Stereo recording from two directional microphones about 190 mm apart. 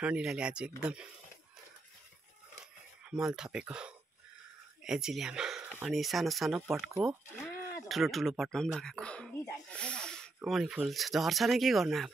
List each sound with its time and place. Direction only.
0.0 s speech: 5° right (ahead or behind)
3.1 s speech: 5° right (ahead or behind)
6.9 s speech: 15° right (ahead or behind)
7.3 s a sound: 10° left (ahead or behind)
7.9 s speech: centre (ahead or behind)